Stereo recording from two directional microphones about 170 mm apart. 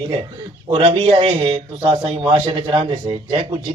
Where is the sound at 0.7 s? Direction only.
30° right (ahead or behind).